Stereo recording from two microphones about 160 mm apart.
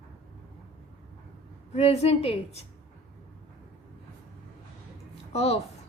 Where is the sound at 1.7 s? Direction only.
40° left (ahead or behind).